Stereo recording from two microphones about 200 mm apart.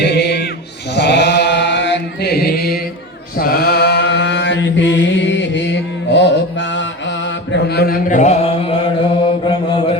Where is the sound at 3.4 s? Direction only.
50° left (ahead or behind).